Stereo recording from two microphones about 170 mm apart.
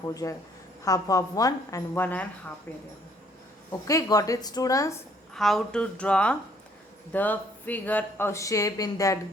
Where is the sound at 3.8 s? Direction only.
20° left (ahead or behind).